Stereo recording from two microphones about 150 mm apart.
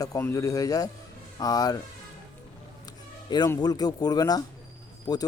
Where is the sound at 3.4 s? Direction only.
25° left (ahead or behind).